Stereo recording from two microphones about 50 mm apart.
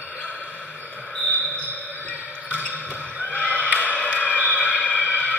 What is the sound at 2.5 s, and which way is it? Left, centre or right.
Basketball bounce, right.